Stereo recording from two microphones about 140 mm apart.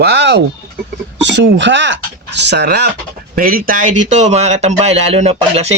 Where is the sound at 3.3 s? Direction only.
90° right.